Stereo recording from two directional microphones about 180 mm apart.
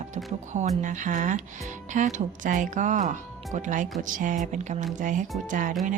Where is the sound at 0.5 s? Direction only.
45° right (ahead or behind).